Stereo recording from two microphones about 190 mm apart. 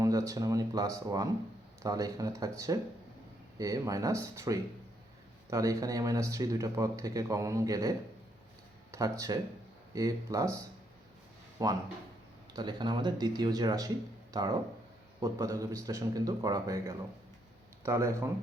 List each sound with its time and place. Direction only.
0.0 s speech: 15° right (ahead or behind)
11.6 s speech: 20° right (ahead or behind)